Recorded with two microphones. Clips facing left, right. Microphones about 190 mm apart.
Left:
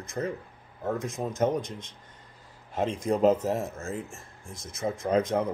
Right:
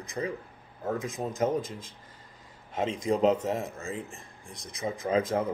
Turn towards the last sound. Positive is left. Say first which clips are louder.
# left 2 dB
turn(degrees=0)  # may be behind; listen again after turning